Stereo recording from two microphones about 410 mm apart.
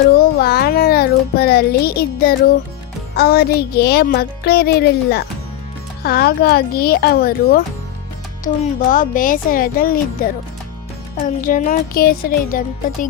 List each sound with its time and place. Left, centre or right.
0.1 s a child's voice: left
8.9 s a child's voice: centre
11.3 s a child's voice: centre